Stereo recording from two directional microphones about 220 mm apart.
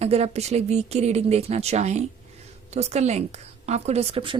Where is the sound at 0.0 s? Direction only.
30° right (ahead or behind).